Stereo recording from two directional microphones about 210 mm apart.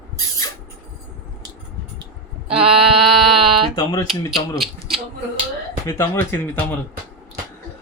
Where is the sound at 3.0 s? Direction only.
Centre (ahead or behind).